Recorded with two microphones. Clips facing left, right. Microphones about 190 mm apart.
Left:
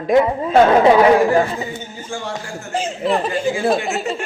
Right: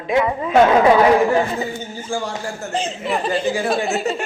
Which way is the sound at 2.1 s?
30° right (ahead or behind).